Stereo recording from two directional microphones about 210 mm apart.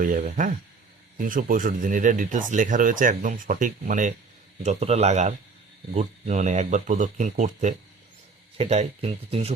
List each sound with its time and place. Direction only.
0.0 s speech: 40° right (ahead or behind)